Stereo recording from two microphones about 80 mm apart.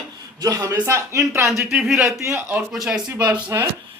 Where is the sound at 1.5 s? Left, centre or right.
Centre.